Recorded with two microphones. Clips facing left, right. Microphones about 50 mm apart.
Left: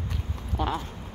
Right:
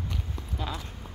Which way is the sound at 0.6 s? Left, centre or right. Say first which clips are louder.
Left 7 dB; left.